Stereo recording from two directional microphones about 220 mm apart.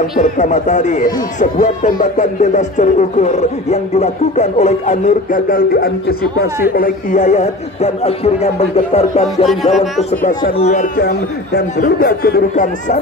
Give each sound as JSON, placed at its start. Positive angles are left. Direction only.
{"t": 0.2, "sound": "a man's voice", "side_deg": 30}
{"t": 11.0, "sound": "speech", "side_deg": 45}